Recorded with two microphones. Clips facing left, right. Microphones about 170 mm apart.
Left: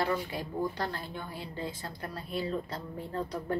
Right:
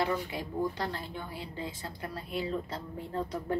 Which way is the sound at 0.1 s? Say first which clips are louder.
Even; 15° right (ahead or behind).